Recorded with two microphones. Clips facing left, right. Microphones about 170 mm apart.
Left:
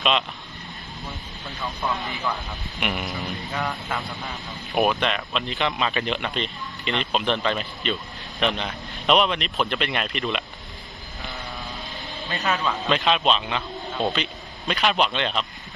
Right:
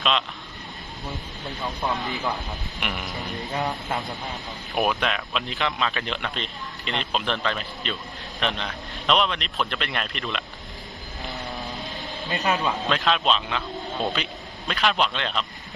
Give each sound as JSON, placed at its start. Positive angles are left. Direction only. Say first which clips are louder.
{"t": 0.0, "sound": "speech", "louder": "left 2 dB", "side_deg": 0}
{"t": 1.5, "sound": "speech", "louder": "even", "side_deg": -20}
{"t": 2.8, "sound": "speech", "louder": "left 4 dB", "side_deg": 5}
{"t": 3.5, "sound": "speech", "louder": "right 2 dB", "side_deg": -25}
{"t": 4.7, "sound": "speech", "louder": "left 2 dB", "side_deg": 0}
{"t": 12.3, "sound": "speech", "louder": "right 1 dB", "side_deg": -20}
{"t": 12.9, "sound": "speech", "louder": "left 3 dB", "side_deg": 0}